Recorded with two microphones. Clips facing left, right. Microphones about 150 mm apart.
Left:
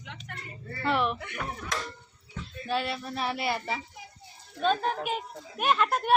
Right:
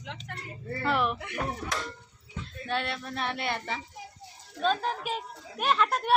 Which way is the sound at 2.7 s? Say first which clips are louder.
Left 2 dB; 5° left (ahead or behind).